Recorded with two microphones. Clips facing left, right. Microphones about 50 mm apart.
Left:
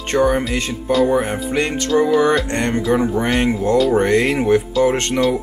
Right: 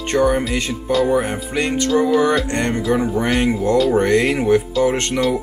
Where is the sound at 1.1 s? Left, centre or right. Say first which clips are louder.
Left 1 dB; centre.